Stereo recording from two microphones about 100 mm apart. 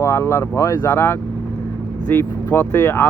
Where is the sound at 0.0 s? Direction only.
25° left (ahead or behind).